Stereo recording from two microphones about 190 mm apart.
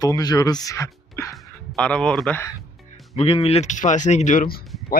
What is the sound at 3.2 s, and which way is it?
Speech, 30° left (ahead or behind).